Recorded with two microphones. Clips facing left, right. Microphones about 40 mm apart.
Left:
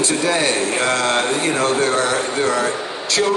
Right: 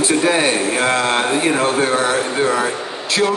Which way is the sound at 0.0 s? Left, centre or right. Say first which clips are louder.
Right 3 dB; centre.